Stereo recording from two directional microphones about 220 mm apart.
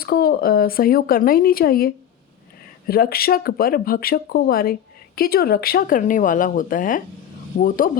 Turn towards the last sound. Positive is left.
turn(degrees=40)  # may be behind; listen again after turning